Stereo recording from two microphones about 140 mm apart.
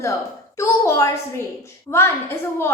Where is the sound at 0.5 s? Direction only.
20° left (ahead or behind).